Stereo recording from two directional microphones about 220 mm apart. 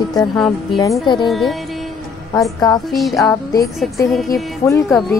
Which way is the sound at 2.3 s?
15° left (ahead or behind).